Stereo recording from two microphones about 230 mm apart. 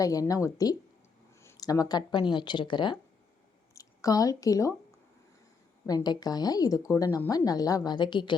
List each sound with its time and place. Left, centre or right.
0.0 s a woman's voice: centre
5.8 s a woman's voice: centre